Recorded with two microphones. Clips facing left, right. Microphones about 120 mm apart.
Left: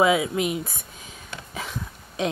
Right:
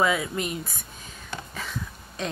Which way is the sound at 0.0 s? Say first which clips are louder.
Left 4 dB; 10° left (ahead or behind).